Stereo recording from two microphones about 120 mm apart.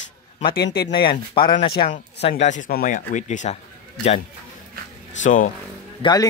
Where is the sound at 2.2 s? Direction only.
65° left (ahead or behind); by 3.5 s 85° left.